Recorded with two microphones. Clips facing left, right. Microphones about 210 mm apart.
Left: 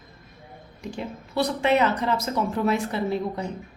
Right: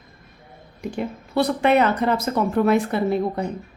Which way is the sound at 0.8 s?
55° right (ahead or behind).